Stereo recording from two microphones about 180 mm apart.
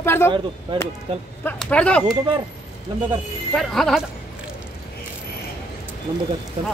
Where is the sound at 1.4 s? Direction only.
5° left (ahead or behind).